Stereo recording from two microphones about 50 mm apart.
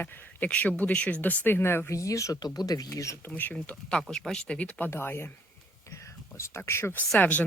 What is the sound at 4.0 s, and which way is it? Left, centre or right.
Speech, centre.